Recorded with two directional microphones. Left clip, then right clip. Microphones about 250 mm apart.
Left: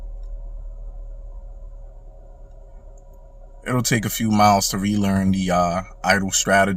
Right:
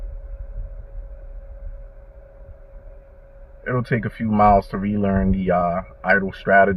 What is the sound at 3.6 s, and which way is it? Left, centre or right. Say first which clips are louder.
Speech: left 1 dB; centre.